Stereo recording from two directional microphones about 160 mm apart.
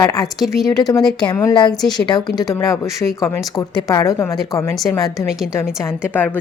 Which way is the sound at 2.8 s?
Centre (ahead or behind).